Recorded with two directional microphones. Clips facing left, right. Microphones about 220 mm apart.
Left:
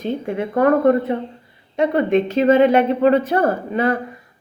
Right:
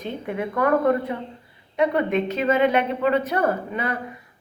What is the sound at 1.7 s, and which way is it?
A woman's voice, 30° left (ahead or behind).